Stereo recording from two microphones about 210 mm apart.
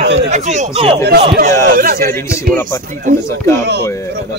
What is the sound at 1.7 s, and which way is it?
Speech, 45° right (ahead or behind).